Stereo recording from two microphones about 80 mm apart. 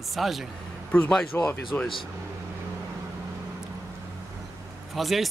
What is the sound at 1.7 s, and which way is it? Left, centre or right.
Speech, left.